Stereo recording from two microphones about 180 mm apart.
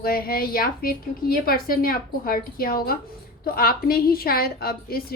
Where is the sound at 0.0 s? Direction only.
55° left (ahead or behind).